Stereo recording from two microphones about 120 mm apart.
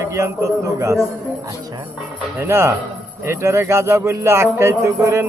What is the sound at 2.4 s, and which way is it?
A man's voice, 20° right (ahead or behind).